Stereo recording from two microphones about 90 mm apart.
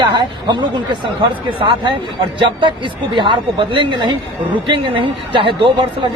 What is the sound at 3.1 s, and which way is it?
A man's voice, 65° right (ahead or behind).